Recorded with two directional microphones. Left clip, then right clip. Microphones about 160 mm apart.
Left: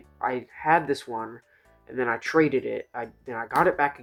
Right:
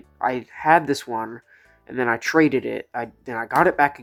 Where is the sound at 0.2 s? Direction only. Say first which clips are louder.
Right 5 dB; 45° right (ahead or behind).